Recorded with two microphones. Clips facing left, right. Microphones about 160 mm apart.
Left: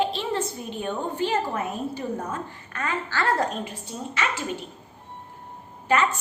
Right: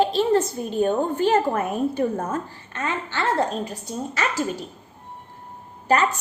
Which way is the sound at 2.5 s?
25° right (ahead or behind).